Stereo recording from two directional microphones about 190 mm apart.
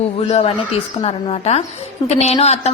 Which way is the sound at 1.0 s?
30° left (ahead or behind).